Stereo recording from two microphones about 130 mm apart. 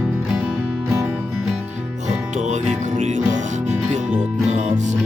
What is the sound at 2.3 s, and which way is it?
Music, 65° right (ahead or behind).